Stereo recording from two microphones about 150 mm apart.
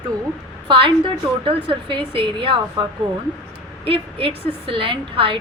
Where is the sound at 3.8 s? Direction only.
40° right (ahead or behind).